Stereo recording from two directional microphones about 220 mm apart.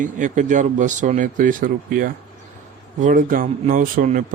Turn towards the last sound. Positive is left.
turn(degrees=-40)  # may be behind; listen again after turning